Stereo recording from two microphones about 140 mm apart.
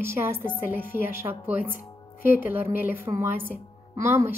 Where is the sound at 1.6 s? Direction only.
90° left.